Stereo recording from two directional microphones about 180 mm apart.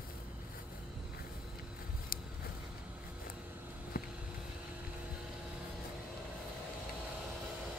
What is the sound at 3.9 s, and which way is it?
Vehicle, 55° left (ahead or behind).